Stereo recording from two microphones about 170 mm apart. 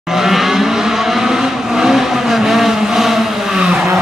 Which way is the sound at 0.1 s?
Centre (ahead or behind).